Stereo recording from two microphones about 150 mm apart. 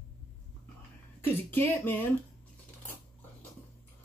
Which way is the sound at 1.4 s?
15° left (ahead or behind).